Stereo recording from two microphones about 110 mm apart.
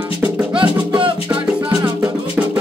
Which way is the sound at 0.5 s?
50° right (ahead or behind).